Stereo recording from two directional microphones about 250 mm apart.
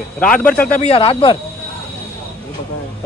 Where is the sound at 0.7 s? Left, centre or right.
Left.